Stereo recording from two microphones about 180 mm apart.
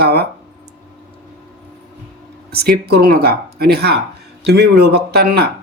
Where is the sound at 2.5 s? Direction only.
60° right (ahead or behind).